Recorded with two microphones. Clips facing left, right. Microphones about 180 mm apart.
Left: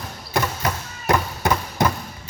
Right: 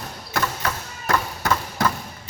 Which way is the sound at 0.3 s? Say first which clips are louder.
Left 2 dB; 20° left (ahead or behind).